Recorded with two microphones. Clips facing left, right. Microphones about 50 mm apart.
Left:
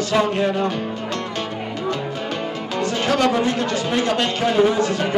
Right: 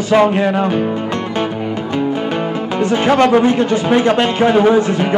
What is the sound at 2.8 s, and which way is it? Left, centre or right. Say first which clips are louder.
Music: right 7 dB; right.